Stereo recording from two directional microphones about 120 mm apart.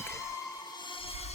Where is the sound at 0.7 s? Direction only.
45° left (ahead or behind).